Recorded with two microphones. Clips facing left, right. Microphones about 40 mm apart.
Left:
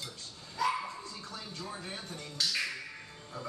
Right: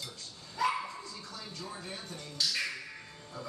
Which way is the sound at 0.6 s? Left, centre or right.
Centre.